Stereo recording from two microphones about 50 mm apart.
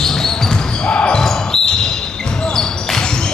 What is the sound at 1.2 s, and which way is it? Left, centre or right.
Basketball bounce, centre.